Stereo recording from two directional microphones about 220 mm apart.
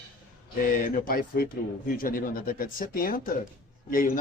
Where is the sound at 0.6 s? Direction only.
40° left (ahead or behind).